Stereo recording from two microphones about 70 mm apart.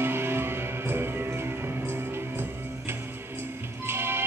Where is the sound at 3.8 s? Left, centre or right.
Right.